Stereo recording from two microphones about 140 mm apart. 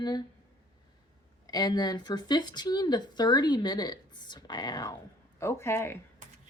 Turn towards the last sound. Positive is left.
turn(degrees=-65)  # may be behind; listen again after turning